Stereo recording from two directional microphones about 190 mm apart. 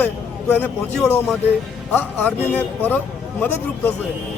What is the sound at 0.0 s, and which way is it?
A man's voice, 10° left (ahead or behind).